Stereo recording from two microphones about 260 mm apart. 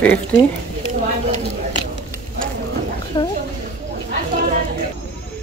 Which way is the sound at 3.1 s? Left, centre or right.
Centre.